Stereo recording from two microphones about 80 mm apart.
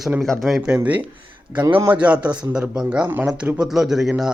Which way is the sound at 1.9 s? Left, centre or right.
Centre.